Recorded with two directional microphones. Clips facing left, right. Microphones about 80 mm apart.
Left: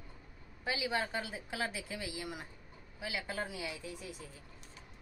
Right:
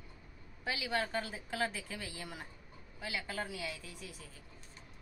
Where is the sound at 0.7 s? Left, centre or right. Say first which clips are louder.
Left 1 dB; centre.